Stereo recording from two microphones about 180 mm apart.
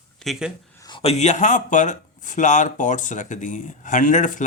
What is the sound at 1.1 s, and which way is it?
Speech, 40° left (ahead or behind).